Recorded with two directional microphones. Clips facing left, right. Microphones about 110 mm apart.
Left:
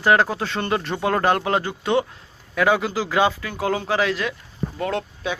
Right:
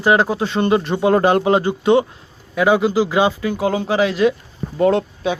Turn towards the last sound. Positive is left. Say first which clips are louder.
# right 9 dB
turn(degrees=-25)  # may be behind; listen again after turning